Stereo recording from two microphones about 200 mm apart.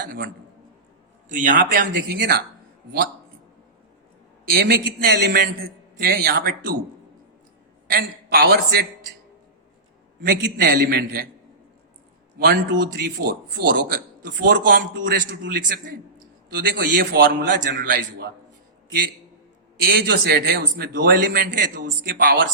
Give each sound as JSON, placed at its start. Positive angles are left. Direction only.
{"t": 1.3, "sound": "a man's voice", "side_deg": -40}
{"t": 4.5, "sound": "a man's voice", "side_deg": -55}
{"t": 7.9, "sound": "a man's voice", "side_deg": -50}
{"t": 10.2, "sound": "a man's voice", "side_deg": -55}
{"t": 12.4, "sound": "a man's voice", "side_deg": -50}
{"t": 14.9, "sound": "a man's voice", "side_deg": -65}
{"t": 19.9, "sound": "a man's voice", "side_deg": -50}